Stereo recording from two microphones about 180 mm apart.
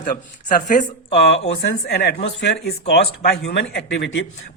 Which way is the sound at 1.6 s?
65° left (ahead or behind).